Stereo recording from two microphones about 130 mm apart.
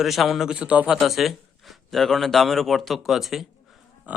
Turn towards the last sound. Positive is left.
turn(degrees=-10)  # may be behind; listen again after turning